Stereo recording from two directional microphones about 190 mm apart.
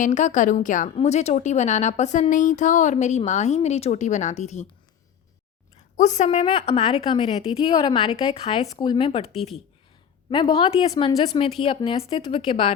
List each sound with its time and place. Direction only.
0.0 s a woman's voice: 40° left (ahead or behind)
6.0 s a woman's voice: 40° left (ahead or behind)